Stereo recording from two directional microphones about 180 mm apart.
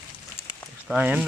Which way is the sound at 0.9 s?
10° right (ahead or behind).